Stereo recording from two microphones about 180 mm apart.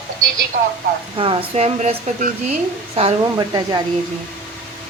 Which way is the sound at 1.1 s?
30° right (ahead or behind).